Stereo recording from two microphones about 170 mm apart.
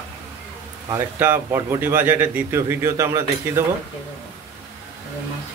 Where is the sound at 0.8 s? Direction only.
15° right (ahead or behind).